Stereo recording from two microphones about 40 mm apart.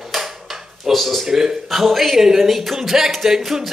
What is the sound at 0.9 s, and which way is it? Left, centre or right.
Speech, centre.